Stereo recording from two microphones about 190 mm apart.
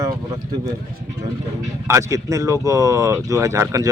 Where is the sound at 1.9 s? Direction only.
15° right (ahead or behind).